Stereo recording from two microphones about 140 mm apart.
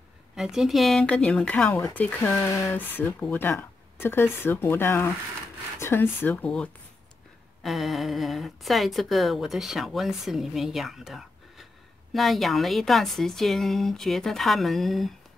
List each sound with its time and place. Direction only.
0.4 s a woman's voice: 5° right (ahead or behind)